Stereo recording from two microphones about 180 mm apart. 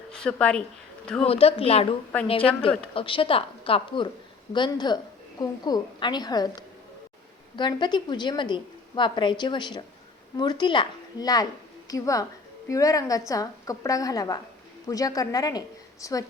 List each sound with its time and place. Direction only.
0.1 s speech: 5° left (ahead or behind)
1.2 s a woman's voice: 35° left (ahead or behind)